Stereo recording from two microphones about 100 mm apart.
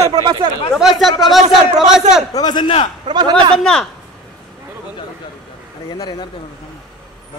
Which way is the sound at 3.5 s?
5° left (ahead or behind).